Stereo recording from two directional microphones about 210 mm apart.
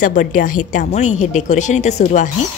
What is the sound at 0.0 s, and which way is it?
Speech, 40° left (ahead or behind).